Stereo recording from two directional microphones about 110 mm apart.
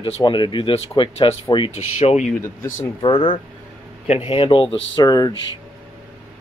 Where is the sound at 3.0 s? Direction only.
45° left (ahead or behind).